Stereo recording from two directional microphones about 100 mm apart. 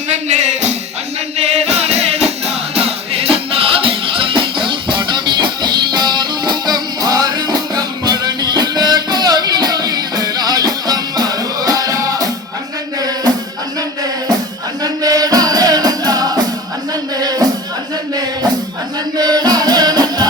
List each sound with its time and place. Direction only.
0.3 s music: 90° right; by 13.3 s 40° right (ahead or behind)
14.8 s music: 40° right (ahead or behind)
19.1 s music: 40° right (ahead or behind)